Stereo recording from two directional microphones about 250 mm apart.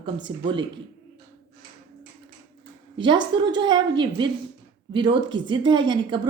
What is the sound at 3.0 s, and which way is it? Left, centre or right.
A woman's voice, centre.